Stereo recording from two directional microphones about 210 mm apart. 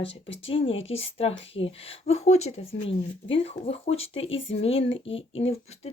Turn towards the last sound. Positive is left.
turn(degrees=30)  # may be behind; listen again after turning